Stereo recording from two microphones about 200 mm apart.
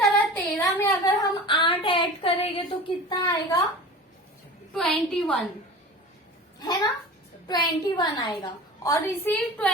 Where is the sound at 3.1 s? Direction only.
20° left (ahead or behind).